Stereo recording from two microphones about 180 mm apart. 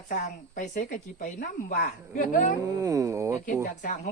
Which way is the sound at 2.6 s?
20° right (ahead or behind).